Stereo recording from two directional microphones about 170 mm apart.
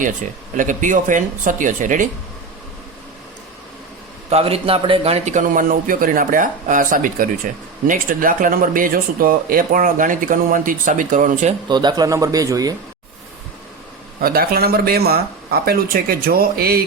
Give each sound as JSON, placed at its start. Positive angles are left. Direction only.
{"t": 0.5, "sound": "speech", "side_deg": -50}
{"t": 4.3, "sound": "speech", "side_deg": -35}
{"t": 11.7, "sound": "speech", "side_deg": -25}
{"t": 14.2, "sound": "speech", "side_deg": -60}